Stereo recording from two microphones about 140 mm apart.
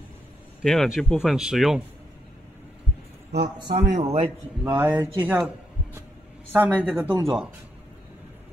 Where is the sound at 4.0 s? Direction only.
45° right (ahead or behind).